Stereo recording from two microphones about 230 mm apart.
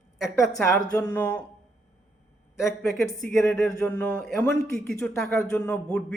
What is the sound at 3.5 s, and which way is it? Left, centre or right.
Speech, centre.